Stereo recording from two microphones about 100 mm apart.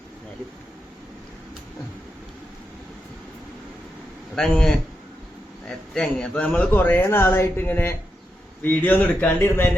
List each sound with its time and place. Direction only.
4.4 s a man's voice: 5° left (ahead or behind); by 9.6 s 20° left (ahead or behind)